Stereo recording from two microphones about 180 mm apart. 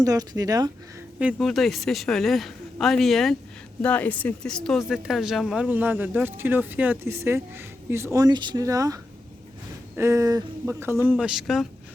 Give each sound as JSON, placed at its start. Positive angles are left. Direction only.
{"t": 0.0, "sound": "speech", "side_deg": -20}
{"t": 1.2, "sound": "a woman's voice", "side_deg": -5}
{"t": 10.0, "sound": "speech", "side_deg": -15}
{"t": 11.2, "sound": "a woman's voice", "side_deg": -5}